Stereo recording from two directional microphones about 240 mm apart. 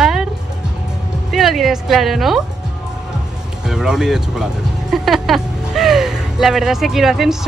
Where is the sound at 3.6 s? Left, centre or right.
Centre.